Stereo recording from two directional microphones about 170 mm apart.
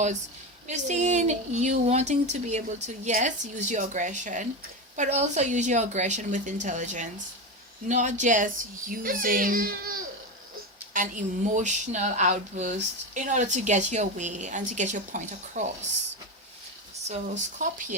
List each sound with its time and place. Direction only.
0.7 s a child's voice: 45° right (ahead or behind)
17.1 s speech: 50° right (ahead or behind)